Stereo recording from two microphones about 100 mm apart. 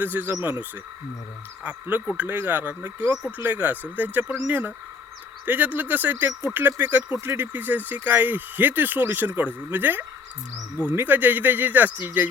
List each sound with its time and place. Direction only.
0.0 s speech: 15° right (ahead or behind)
1.6 s speech: 15° right (ahead or behind)